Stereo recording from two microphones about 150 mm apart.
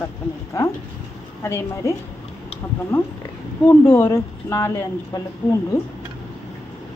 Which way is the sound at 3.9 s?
20° left (ahead or behind).